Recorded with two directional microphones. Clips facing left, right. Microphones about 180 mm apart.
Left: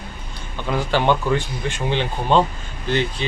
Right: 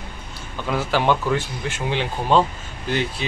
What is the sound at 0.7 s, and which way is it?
Speech, centre (ahead or behind).